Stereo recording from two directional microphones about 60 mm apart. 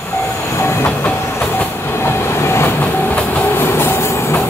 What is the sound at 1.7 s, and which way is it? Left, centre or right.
Train, left.